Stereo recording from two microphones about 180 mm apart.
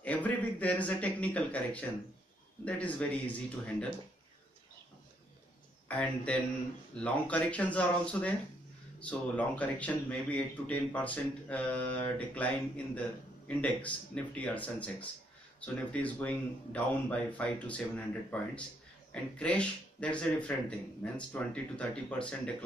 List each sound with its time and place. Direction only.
0.0 s speech: 10° left (ahead or behind)
5.9 s speech: 5° left (ahead or behind)